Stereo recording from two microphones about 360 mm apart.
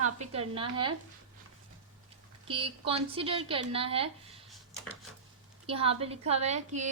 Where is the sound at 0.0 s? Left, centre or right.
Centre.